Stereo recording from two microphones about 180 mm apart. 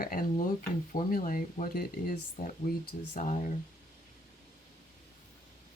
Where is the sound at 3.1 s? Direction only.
40° left (ahead or behind).